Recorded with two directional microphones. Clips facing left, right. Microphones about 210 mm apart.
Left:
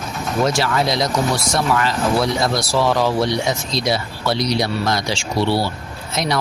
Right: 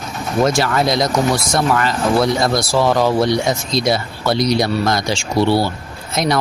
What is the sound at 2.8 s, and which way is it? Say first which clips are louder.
Speech: right 3 dB; 45° right (ahead or behind).